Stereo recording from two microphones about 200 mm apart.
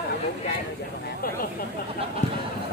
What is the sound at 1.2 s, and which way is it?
Speech, 45° left (ahead or behind).